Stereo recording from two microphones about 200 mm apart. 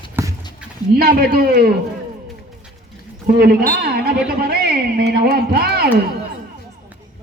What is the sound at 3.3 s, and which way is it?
A man's voice, 50° right (ahead or behind).